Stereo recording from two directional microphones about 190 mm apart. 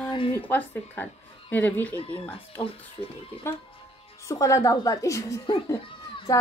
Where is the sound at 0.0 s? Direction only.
25° left (ahead or behind).